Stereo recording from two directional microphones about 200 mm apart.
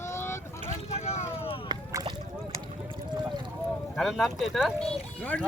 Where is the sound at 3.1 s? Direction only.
20° right (ahead or behind).